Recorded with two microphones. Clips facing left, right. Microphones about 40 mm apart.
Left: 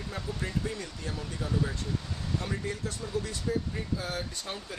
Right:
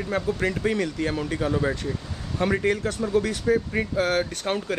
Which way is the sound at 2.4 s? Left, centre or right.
Right.